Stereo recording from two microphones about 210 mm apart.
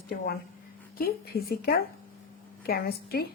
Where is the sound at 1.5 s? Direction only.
45° left (ahead or behind).